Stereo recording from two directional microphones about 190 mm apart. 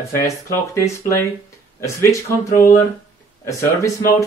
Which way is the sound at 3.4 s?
15° left (ahead or behind).